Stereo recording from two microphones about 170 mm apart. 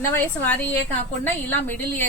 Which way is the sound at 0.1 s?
10° left (ahead or behind).